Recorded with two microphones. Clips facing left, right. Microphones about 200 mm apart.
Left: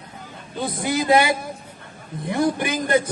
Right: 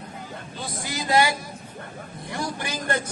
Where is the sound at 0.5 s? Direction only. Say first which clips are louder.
Left 10 dB; 55° left (ahead or behind).